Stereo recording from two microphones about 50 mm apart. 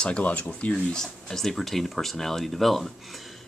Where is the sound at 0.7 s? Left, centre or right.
Centre.